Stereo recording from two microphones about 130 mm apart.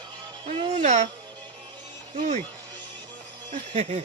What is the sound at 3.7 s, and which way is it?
Speech, 65° right (ahead or behind).